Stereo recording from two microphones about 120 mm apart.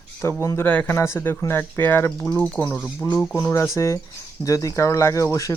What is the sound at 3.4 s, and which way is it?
Speech, 25° left (ahead or behind).